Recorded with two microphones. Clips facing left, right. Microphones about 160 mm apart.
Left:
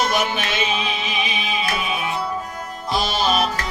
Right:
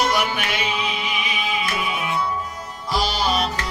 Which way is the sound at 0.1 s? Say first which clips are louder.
Left 1 dB; 25° left (ahead or behind).